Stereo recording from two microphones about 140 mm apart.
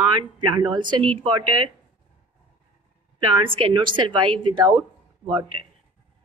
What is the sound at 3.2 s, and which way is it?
A woman's voice, 35° right (ahead or behind).